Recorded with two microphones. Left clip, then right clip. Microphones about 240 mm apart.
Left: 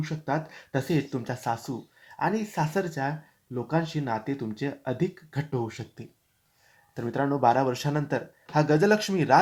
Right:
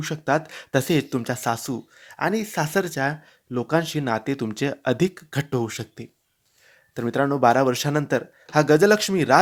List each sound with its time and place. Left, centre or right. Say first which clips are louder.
0.0 s speech: right 7 dB; right